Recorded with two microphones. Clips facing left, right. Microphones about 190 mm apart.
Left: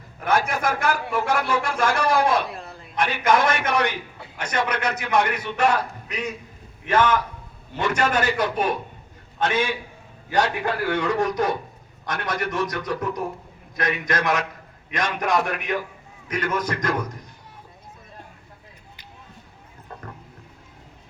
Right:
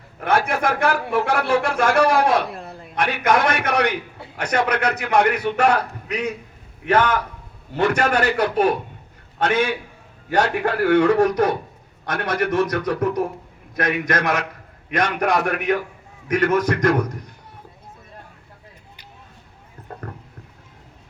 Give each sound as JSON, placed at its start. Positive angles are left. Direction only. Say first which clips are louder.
{"t": 0.2, "sound": "speech", "louder": "right 2 dB", "side_deg": -60}